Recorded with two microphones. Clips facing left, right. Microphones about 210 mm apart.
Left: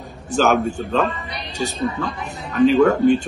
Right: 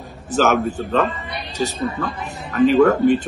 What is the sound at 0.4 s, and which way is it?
Speech, centre (ahead or behind).